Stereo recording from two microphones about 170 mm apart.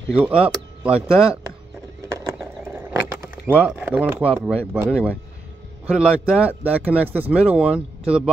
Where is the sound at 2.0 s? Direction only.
20° right (ahead or behind).